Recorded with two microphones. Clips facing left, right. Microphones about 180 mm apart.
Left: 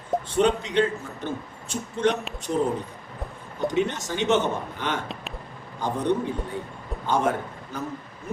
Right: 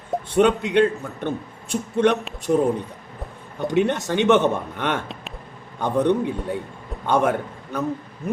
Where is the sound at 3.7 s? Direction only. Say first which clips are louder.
Right 7 dB; 65° right (ahead or behind).